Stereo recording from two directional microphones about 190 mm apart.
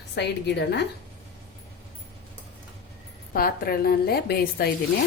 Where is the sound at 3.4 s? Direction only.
50° left (ahead or behind).